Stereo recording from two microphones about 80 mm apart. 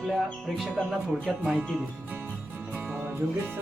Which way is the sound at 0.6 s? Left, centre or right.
Centre.